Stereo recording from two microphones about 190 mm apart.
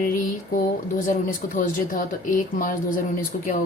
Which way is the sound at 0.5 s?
45° left (ahead or behind).